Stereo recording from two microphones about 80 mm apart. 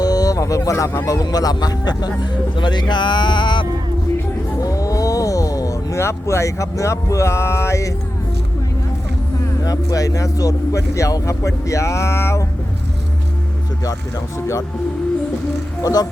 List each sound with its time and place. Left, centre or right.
0.0 s a sound: left
1.0 s speech: left
4.6 s roaring cats: left
9.6 s speech: left
14.3 s speech: left
15.8 s speech: left